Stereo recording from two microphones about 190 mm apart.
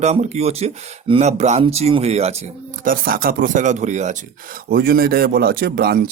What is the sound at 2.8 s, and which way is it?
Speech, 50° right (ahead or behind).